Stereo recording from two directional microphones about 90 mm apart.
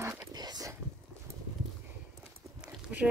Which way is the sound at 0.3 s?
50° right (ahead or behind).